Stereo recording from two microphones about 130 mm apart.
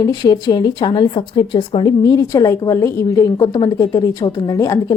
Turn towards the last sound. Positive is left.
turn(degrees=25)  # may be behind; listen again after turning